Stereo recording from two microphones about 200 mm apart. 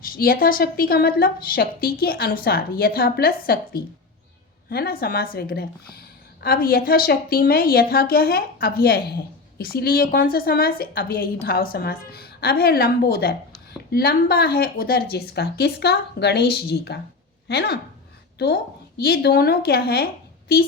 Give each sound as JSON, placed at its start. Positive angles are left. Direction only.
{"t": 0.0, "sound": "a woman's voice", "side_deg": 45}